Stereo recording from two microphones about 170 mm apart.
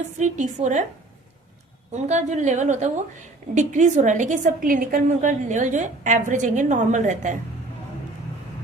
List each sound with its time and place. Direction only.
0.2 s a woman's voice: 45° right (ahead or behind)
1.9 s a woman's voice: 45° right (ahead or behind)